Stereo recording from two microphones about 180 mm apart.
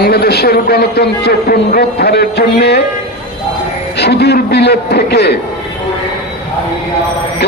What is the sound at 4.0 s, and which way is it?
A man's voice, 65° left (ahead or behind).